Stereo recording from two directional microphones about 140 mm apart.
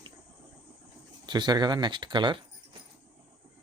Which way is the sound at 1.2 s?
30° right (ahead or behind).